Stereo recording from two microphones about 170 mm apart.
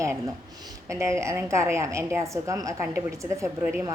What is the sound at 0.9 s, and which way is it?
A woman's voice, 15° right (ahead or behind).